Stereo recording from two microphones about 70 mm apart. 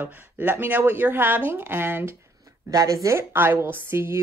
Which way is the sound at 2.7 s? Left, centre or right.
Right.